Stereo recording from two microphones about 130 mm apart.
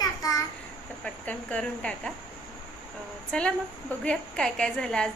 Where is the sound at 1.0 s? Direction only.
10° left (ahead or behind).